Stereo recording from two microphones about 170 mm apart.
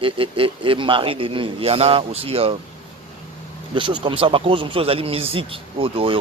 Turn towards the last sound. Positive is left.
turn(degrees=-30)  # may be behind; listen again after turning